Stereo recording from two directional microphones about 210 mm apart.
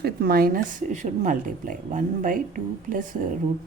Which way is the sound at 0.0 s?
45° right (ahead or behind).